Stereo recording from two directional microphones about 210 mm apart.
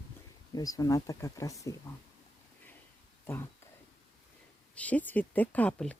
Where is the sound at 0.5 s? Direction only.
15° left (ahead or behind).